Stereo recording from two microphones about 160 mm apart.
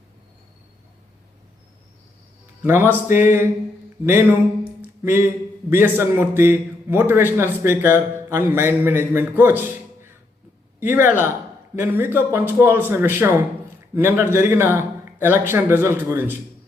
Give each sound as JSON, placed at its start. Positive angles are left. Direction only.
{"t": 2.6, "sound": "a man's voice", "side_deg": -15}
{"t": 4.8, "sound": "a sound", "side_deg": -15}
{"t": 5.7, "sound": "a man's voice", "side_deg": -15}